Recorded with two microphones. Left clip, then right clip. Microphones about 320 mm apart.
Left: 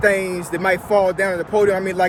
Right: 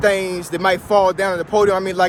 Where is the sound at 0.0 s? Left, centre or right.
Centre.